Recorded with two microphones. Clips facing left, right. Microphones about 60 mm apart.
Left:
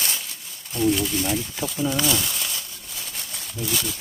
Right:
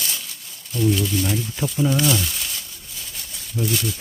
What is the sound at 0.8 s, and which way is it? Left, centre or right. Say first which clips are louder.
Speech: right 1 dB; centre.